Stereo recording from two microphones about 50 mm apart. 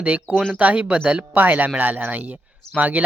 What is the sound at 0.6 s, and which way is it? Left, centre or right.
Speech, right.